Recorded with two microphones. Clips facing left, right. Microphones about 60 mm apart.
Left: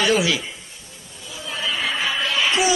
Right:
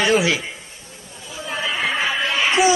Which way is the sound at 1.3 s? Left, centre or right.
Right.